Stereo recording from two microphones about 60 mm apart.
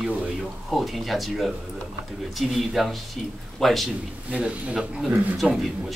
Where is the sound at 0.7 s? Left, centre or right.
Centre.